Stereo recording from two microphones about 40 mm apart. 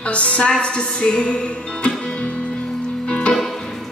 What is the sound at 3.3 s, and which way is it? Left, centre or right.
Music, centre.